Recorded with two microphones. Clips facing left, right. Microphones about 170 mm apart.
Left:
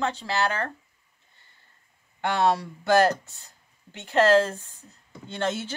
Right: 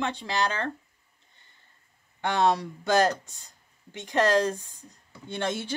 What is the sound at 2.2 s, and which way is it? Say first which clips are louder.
Speech: left 1 dB; 20° right (ahead or behind).